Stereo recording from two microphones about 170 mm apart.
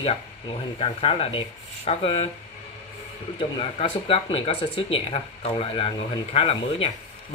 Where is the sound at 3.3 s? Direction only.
30° left (ahead or behind).